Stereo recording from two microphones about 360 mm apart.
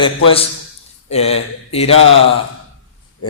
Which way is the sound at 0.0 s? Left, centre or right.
Centre.